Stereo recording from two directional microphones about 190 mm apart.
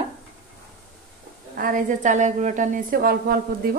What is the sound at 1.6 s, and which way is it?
A woman's voice, 45° right (ahead or behind).